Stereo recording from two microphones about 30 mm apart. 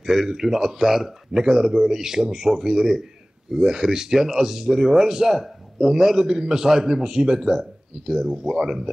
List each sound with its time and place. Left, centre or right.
0.0 s a man's voice: centre